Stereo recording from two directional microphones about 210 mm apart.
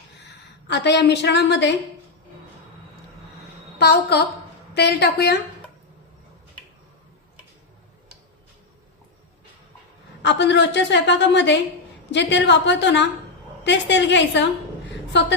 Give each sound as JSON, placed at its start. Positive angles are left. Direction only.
{"t": 0.7, "sound": "a woman's voice", "side_deg": 55}
{"t": 3.8, "sound": "a woman's voice", "side_deg": 50}
{"t": 10.2, "sound": "a woman's voice", "side_deg": 55}